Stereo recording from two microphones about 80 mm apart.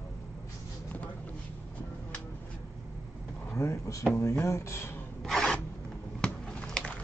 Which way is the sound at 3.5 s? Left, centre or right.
Left.